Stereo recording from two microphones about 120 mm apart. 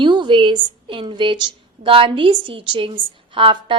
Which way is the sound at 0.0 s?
40° right (ahead or behind).